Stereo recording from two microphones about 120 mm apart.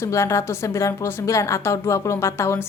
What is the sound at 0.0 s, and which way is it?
A woman's voice, 25° left (ahead or behind).